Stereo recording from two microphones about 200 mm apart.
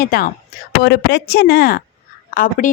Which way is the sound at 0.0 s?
50° left (ahead or behind).